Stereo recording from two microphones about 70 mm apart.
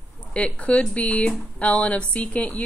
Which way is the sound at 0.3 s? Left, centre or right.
Centre.